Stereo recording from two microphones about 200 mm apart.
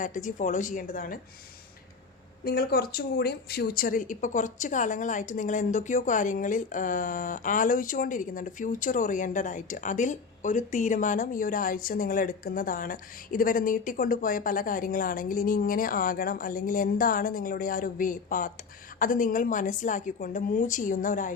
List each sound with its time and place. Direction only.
0.0 s a woman's voice: 40° left (ahead or behind)
2.4 s a woman's voice: 50° left (ahead or behind)